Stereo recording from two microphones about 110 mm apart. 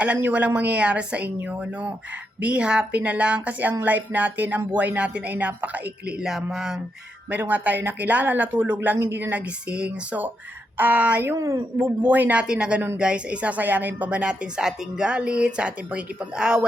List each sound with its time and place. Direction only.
0.0 s speech: 15° right (ahead or behind)
6.2 s a sound: 5° right (ahead or behind)
7.3 s speech: 15° right (ahead or behind)
11.3 s speech: 30° right (ahead or behind)
11.8 s speech: 15° right (ahead or behind)